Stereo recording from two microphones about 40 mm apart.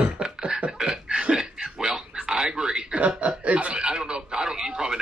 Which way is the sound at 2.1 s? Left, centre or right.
Centre.